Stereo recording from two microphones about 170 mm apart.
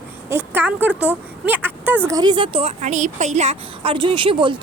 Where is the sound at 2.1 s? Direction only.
25° right (ahead or behind).